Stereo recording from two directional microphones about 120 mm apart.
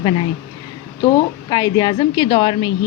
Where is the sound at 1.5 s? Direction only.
35° left (ahead or behind).